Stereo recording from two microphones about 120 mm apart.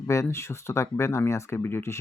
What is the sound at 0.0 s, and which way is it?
Speech, 25° left (ahead or behind).